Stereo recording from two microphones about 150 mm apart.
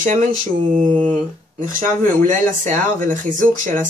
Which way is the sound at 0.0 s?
60° right (ahead or behind).